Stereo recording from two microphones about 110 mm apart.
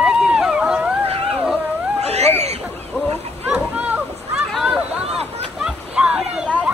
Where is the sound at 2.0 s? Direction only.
75° right (ahead or behind).